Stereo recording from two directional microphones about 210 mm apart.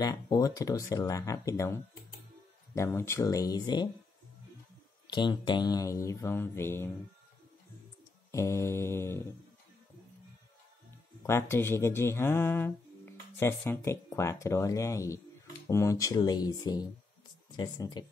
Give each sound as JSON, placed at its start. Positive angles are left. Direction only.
{"t": 0.0, "sound": "speech", "side_deg": 20}
{"t": 5.0, "sound": "speech", "side_deg": 20}
{"t": 8.3, "sound": "speech", "side_deg": 15}
{"t": 11.2, "sound": "speech", "side_deg": 10}